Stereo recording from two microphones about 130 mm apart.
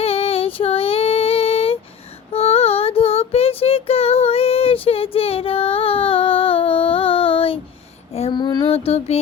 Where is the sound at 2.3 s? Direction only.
50° left (ahead or behind).